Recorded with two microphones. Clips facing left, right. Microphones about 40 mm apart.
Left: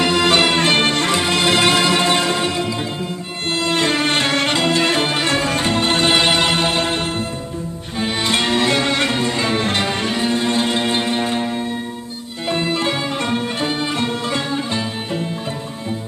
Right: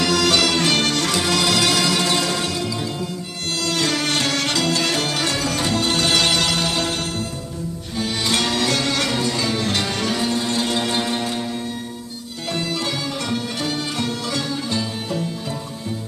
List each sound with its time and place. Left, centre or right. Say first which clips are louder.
0.0 s music: left 3 dB; left
7.9 s string section: left 3 dB; left
12.5 s music: left 5 dB; left